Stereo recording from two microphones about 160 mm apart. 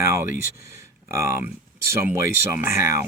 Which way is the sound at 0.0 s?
15° right (ahead or behind).